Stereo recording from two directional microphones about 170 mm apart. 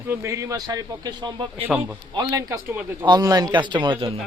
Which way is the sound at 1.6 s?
10° right (ahead or behind).